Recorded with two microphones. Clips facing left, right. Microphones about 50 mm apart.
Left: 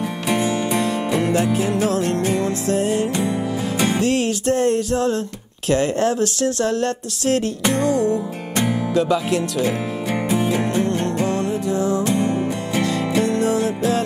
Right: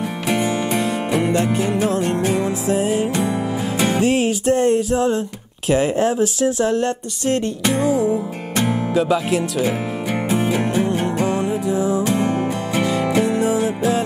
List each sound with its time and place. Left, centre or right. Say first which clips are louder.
0.3 s music: even; right
0.7 s music: even; centre
1.3 s speech: even; centre
7.7 s music: right 1 dB; centre